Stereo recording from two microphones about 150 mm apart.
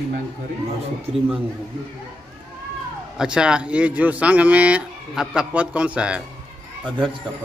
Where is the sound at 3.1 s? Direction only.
5° right (ahead or behind).